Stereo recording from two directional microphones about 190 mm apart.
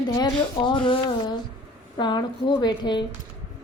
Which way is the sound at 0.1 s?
25° left (ahead or behind).